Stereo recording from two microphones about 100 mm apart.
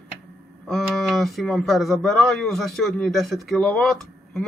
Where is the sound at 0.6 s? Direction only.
Centre (ahead or behind).